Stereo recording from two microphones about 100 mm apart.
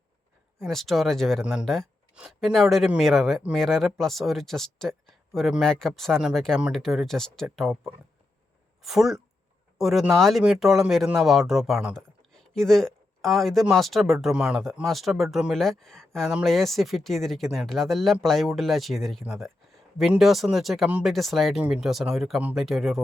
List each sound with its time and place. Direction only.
0.6 s speech: centre (ahead or behind)
8.8 s speech: centre (ahead or behind)